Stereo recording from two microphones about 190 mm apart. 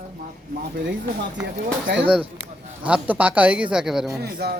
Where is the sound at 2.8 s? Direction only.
10° right (ahead or behind).